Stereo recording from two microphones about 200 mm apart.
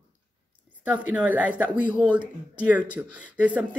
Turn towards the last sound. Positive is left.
turn(degrees=-5)  # may be behind; listen again after turning